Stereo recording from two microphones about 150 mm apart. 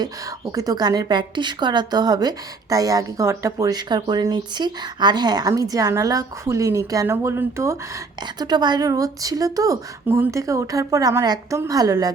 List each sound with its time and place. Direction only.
0.5 s a woman's voice: 25° right (ahead or behind)